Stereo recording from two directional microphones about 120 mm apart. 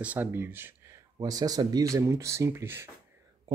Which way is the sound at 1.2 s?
30° right (ahead or behind).